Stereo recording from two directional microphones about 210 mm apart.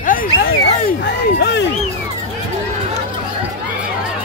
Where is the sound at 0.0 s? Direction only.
40° left (ahead or behind).